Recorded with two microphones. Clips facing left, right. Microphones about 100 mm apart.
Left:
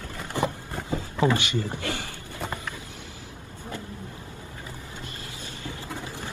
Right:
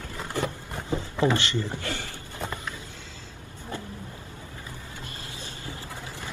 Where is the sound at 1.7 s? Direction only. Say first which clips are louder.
Left 1 dB; 15° left (ahead or behind).